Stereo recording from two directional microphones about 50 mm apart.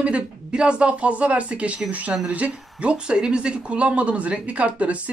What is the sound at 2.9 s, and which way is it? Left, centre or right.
Speech, centre.